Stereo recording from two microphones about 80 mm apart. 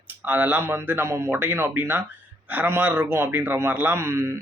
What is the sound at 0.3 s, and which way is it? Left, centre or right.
A man's voice, right.